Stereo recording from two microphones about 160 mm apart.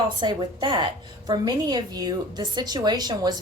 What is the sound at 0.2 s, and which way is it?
A woman's voice, 30° right (ahead or behind).